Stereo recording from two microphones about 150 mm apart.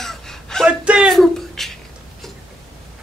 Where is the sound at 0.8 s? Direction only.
5° right (ahead or behind).